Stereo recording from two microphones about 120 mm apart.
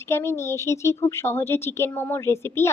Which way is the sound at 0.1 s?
20° left (ahead or behind).